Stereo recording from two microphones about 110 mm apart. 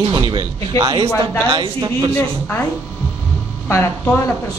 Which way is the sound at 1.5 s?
50° right (ahead or behind).